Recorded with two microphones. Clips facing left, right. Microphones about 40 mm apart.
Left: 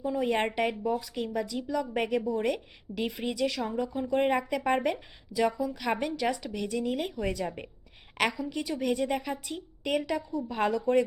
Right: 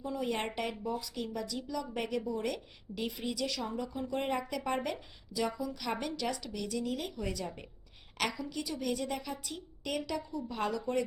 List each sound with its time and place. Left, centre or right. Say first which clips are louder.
0.0 s a woman's voice: left 7 dB; left
0.3 s a woman's voice: left 8 dB; left